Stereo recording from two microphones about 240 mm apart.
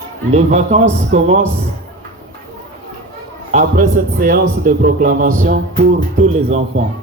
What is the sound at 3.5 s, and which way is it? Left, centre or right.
A man's voice, right.